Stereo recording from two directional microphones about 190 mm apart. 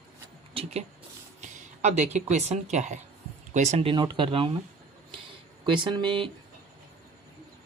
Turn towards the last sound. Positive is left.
turn(degrees=-25)  # may be behind; listen again after turning